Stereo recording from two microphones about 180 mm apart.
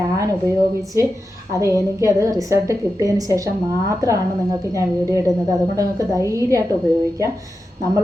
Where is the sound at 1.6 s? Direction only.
15° right (ahead or behind).